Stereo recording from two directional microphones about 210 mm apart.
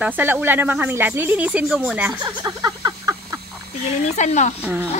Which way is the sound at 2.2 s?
20° right (ahead or behind).